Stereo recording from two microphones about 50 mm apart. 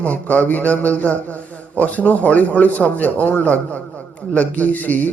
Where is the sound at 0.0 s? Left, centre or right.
Left.